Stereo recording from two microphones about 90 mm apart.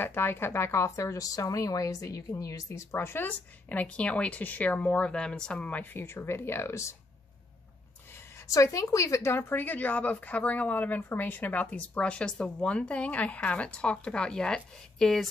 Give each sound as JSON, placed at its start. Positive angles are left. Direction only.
{"t": 0.0, "sound": "speech", "side_deg": 25}
{"t": 8.5, "sound": "a woman's voice", "side_deg": 35}